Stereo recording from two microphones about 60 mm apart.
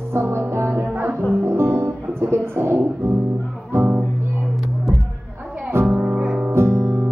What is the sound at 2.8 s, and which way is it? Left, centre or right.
Speech, right.